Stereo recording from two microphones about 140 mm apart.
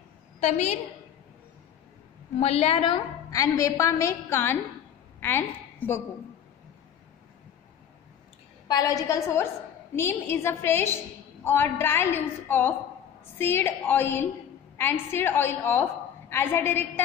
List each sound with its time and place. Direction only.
0.4 s a woman's voice: 55° left (ahead or behind)
2.4 s a woman's voice: 45° left (ahead or behind)
3.3 s a woman's voice: 25° left (ahead or behind)
8.6 s a woman's voice: 25° left (ahead or behind)